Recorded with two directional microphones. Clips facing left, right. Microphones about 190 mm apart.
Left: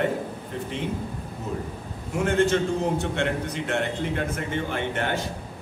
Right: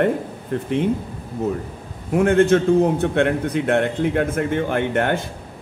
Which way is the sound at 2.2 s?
55° right (ahead or behind).